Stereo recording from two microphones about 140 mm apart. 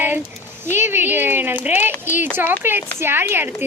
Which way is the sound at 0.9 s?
15° right (ahead or behind).